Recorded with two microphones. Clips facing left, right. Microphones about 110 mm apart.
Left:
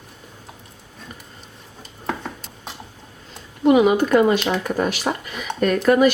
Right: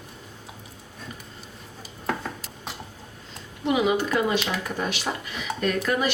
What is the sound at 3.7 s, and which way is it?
Speech, 50° left (ahead or behind).